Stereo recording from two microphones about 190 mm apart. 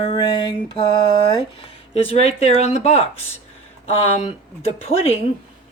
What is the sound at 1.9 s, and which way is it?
Speech, 35° left (ahead or behind).